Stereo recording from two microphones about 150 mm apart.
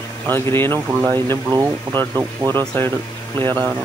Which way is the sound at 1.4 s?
20° right (ahead or behind).